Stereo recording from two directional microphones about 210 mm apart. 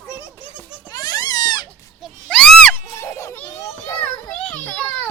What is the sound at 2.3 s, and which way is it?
Goat, 5° left (ahead or behind).